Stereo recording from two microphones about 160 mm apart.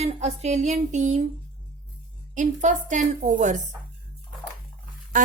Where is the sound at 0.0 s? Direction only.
40° right (ahead or behind).